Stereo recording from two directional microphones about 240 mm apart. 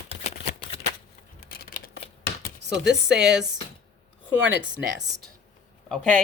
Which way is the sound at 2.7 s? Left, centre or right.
Centre.